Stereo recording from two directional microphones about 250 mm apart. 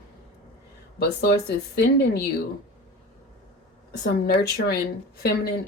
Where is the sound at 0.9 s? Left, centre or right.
Left.